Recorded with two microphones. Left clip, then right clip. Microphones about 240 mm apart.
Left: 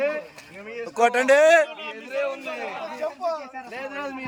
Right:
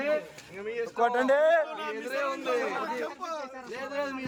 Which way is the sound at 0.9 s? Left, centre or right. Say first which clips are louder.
Left 7 dB; left.